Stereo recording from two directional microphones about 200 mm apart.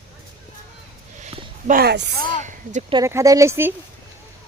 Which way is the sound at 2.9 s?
15° right (ahead or behind).